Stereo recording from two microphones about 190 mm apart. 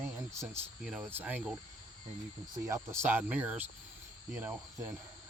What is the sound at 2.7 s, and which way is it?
Speech, 15° right (ahead or behind).